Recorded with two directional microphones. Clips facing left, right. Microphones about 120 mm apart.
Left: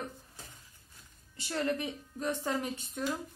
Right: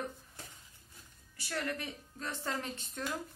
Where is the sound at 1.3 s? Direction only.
25° left (ahead or behind).